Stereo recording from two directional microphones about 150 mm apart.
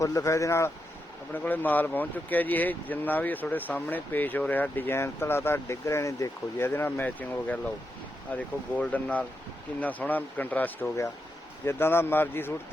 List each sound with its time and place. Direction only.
0.0 s speech: 20° left (ahead or behind)